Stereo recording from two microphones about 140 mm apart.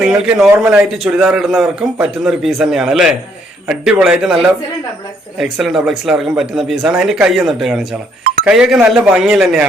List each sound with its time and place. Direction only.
0.0 s a man's voice: 5° right (ahead or behind)
0.9 s a man's voice: 5° right (ahead or behind)
5.4 s a man's voice: centre (ahead or behind)